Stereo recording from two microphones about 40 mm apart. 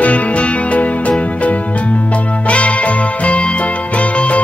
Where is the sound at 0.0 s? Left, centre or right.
Left.